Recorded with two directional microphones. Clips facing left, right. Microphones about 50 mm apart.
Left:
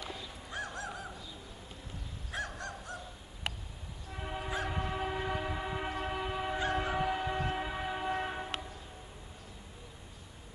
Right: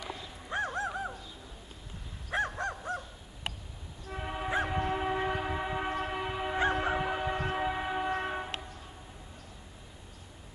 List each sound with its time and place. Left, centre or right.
0.5 s a sound: right
2.3 s crow: right
4.1 s train: centre
6.7 s a sound: centre
7.4 s train: centre
8.2 s train horn: centre